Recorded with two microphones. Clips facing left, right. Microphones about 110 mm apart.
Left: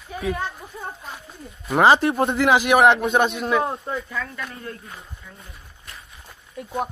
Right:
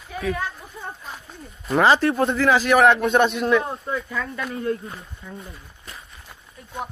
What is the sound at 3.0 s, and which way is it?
Speech, 5° left (ahead or behind).